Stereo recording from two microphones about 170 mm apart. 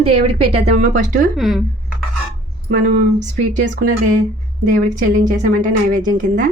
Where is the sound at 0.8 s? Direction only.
50° right (ahead or behind).